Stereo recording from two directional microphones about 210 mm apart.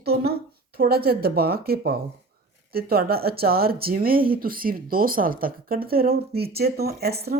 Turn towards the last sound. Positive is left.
turn(degrees=-50)  # may be behind; listen again after turning